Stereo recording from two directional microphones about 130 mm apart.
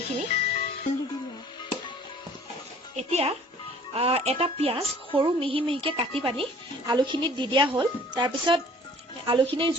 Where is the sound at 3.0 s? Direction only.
55° right (ahead or behind).